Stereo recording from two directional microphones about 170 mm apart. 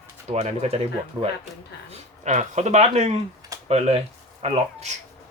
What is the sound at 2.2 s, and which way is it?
Speech, 45° right (ahead or behind).